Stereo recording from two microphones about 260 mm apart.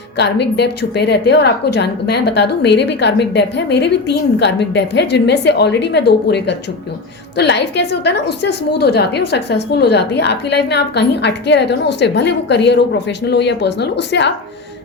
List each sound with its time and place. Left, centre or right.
0.2 s a woman's voice: left